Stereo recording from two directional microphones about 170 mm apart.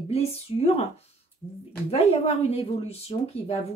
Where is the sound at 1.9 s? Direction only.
35° left (ahead or behind).